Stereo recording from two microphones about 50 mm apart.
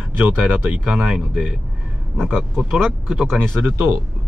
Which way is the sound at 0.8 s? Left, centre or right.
Centre.